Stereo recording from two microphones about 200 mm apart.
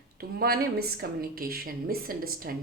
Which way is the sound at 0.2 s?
50° right (ahead or behind).